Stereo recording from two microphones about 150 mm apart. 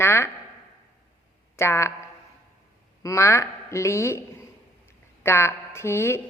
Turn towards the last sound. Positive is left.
turn(degrees=15)  # may be behind; listen again after turning